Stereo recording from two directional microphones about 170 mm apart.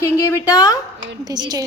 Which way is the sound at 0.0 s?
15° left (ahead or behind).